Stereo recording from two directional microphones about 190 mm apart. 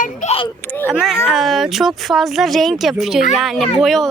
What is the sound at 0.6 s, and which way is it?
Speech, 10° left (ahead or behind).